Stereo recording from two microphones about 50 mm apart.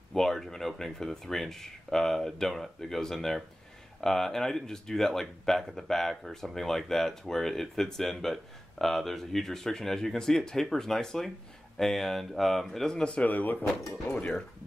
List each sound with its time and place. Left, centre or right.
0.1 s speech: centre
13.2 s speech: left
14.1 s speech: left